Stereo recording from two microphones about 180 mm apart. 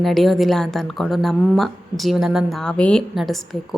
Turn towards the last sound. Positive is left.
turn(degrees=0)  # may be behind; listen again after turning